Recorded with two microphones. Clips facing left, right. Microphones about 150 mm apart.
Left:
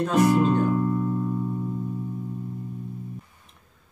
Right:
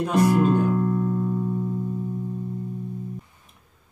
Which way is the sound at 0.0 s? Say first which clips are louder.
Even; 10° right (ahead or behind).